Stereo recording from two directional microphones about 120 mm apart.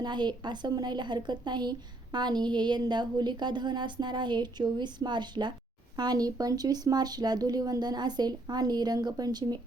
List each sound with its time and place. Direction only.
0.0 s a woman's voice: 40° right (ahead or behind)